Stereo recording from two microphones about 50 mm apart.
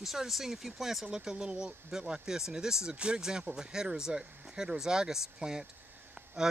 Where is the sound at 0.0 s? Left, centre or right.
Centre.